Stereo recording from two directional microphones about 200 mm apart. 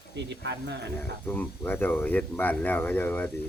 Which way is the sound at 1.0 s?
10° left (ahead or behind).